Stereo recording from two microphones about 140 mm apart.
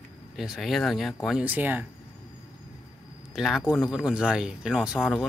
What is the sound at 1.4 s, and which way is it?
Speech, 10° right (ahead or behind).